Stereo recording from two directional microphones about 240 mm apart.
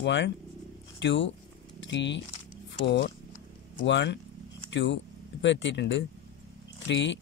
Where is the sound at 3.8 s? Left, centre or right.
Left.